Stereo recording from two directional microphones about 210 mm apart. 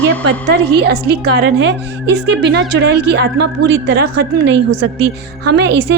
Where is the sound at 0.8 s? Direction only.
50° right (ahead or behind).